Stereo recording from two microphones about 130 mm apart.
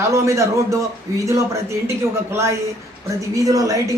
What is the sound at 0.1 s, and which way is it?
Speech, 25° right (ahead or behind).